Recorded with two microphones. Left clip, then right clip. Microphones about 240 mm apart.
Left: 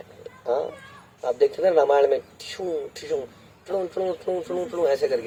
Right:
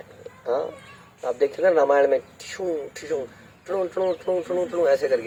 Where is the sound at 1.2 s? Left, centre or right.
Left.